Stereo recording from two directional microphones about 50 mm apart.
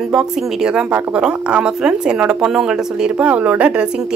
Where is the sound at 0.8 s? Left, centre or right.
Right.